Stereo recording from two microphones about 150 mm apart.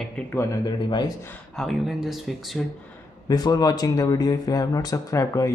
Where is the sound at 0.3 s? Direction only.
20° left (ahead or behind).